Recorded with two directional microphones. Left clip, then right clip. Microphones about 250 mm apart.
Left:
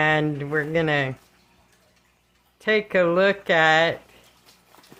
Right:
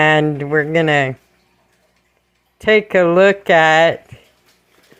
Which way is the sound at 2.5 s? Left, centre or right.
Right.